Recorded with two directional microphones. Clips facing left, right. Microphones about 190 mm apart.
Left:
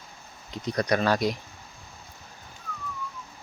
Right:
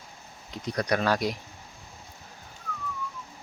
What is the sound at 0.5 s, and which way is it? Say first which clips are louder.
Speech: left 2 dB; 10° right (ahead or behind).